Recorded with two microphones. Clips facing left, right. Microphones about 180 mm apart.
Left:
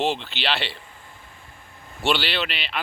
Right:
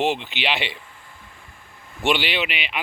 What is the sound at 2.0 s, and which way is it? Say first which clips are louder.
Speech: right 2 dB; 15° right (ahead or behind).